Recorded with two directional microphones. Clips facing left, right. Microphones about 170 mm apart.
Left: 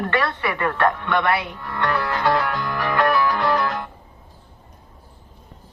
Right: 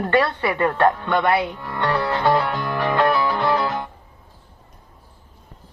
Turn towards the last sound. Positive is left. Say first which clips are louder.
# even
turn(degrees=-25)  # may be behind; listen again after turning